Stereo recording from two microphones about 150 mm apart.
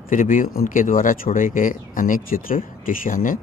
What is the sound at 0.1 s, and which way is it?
Speech, 60° left (ahead or behind).